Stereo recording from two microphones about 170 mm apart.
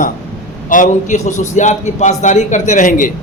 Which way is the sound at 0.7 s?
50° left (ahead or behind).